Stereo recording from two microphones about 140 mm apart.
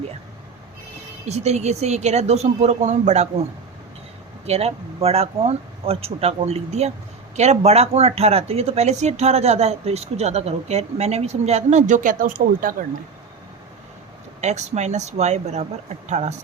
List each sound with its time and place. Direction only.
1.2 s speech: 50° right (ahead or behind)
4.4 s speech: 50° right (ahead or behind); by 12.7 s 80° right
14.4 s speech: 55° right (ahead or behind)